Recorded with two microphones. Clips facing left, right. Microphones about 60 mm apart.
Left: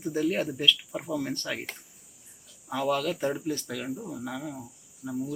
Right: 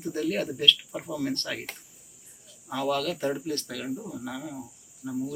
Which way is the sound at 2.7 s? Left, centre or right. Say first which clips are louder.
Even; centre.